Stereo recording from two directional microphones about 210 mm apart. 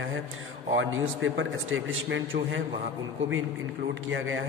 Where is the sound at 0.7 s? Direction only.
70° right (ahead or behind).